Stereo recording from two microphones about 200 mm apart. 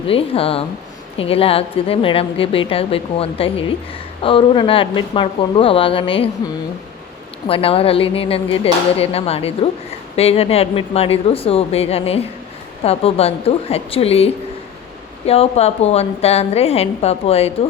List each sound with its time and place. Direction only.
0.1 s a woman's voice: 30° left (ahead or behind)
7.4 s a woman's voice: 30° left (ahead or behind)
15.3 s a woman's voice: 30° left (ahead or behind)